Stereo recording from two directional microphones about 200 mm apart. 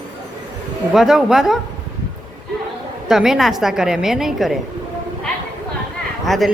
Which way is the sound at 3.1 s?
Centre (ahead or behind).